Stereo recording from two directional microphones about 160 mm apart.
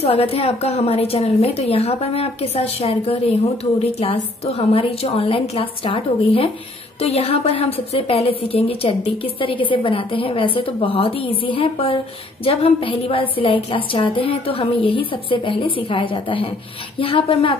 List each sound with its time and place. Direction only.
0.0 s a woman's voice: 40° left (ahead or behind)